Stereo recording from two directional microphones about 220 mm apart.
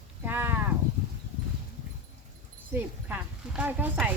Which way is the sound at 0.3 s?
10° right (ahead or behind).